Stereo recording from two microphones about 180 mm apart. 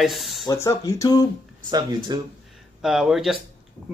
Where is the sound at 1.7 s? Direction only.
20° right (ahead or behind).